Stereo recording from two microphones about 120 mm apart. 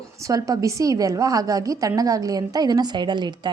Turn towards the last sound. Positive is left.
turn(degrees=-40)  # may be behind; listen again after turning